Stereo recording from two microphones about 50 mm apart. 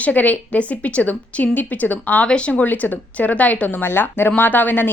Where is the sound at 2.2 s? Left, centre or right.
Left.